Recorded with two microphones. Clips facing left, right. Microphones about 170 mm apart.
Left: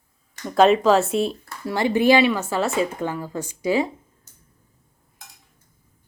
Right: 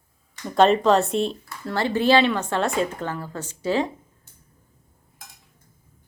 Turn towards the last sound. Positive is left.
turn(degrees=40)  # may be behind; listen again after turning